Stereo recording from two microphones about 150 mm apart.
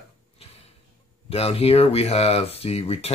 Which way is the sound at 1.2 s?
40° left (ahead or behind).